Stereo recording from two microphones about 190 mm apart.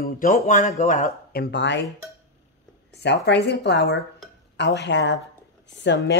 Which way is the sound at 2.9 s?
65° left (ahead or behind).